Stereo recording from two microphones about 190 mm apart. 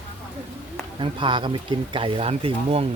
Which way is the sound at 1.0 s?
25° right (ahead or behind).